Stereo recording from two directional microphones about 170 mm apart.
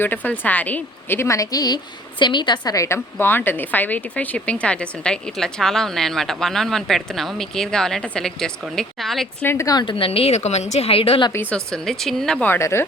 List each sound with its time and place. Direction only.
0.0 s a woman's voice: 10° left (ahead or behind)
9.5 s a woman's voice: 20° left (ahead or behind); by 11.3 s 35° left (ahead or behind)
11.3 s a woman's voice: 10° left (ahead or behind)